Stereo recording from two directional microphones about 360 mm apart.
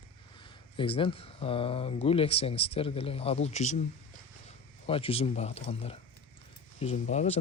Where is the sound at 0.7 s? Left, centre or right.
Centre.